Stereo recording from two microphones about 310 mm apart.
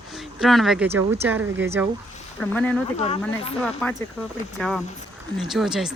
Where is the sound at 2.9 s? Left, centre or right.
Centre.